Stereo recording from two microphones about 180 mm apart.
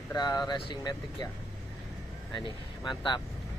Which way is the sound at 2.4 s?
25° left (ahead or behind).